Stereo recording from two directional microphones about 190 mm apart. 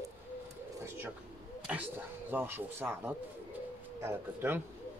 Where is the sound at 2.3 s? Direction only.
10° right (ahead or behind).